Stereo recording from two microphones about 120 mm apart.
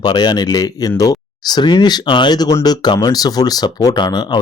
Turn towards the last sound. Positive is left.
turn(degrees=35)  # may be behind; listen again after turning